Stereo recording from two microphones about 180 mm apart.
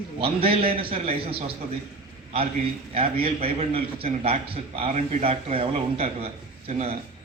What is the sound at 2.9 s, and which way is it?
A man's voice, 35° right (ahead or behind).